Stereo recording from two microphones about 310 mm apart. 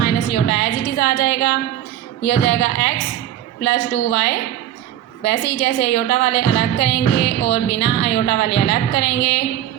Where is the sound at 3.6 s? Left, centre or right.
Left.